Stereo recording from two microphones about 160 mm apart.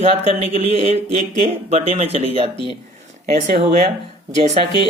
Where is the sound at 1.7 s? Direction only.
40° right (ahead or behind).